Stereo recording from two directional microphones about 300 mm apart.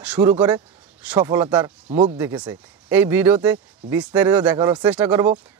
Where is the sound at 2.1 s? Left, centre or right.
Centre.